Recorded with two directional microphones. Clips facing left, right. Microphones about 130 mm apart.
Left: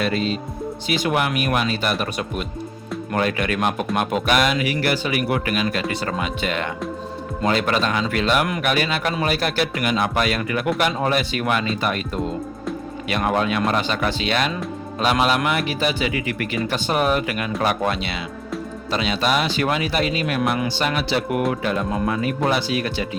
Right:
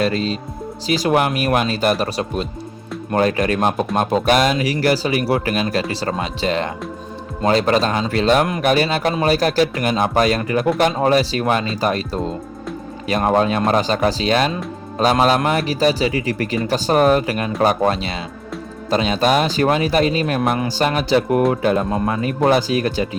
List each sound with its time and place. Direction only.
0.0 s speech: 35° right (ahead or behind)